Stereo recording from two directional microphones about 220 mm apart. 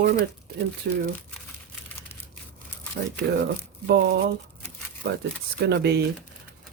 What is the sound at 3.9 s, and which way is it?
Speech, 50° right (ahead or behind).